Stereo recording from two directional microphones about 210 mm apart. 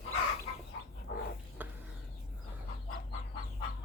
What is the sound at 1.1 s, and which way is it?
Dog, 50° left (ahead or behind).